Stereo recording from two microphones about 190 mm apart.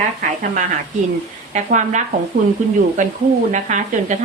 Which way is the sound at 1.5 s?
40° right (ahead or behind).